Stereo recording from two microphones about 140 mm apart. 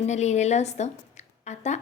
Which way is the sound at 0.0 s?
55° left (ahead or behind).